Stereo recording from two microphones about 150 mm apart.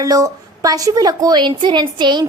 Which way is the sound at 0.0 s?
25° right (ahead or behind).